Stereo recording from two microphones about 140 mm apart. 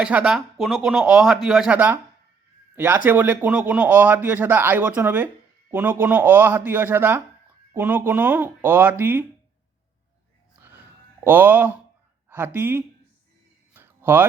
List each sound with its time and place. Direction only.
0.0 s speech: 10° right (ahead or behind)
11.2 s speech: 15° right (ahead or behind)
13.7 s a sound: 15° right (ahead or behind)